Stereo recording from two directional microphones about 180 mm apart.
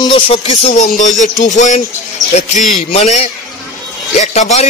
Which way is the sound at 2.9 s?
35° left (ahead or behind).